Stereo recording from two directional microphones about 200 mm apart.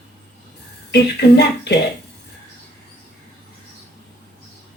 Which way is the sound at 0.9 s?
55° left (ahead or behind).